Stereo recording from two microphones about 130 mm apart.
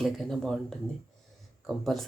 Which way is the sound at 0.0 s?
Centre (ahead or behind).